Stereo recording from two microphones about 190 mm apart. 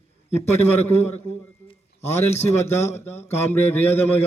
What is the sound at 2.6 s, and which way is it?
A man's voice, 15° left (ahead or behind).